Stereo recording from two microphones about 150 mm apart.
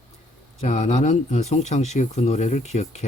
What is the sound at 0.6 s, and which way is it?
Speech, 50° left (ahead or behind).